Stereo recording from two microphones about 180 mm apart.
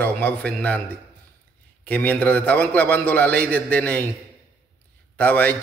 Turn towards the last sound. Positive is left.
turn(degrees=10)  # may be behind; listen again after turning